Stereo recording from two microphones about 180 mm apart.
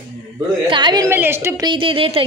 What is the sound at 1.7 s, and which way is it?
Speech, 30° right (ahead or behind).